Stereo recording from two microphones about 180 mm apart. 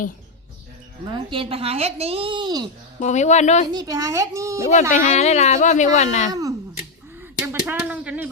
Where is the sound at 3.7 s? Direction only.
20° right (ahead or behind).